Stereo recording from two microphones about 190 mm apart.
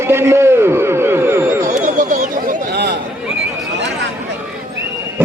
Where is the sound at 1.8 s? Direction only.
40° right (ahead or behind).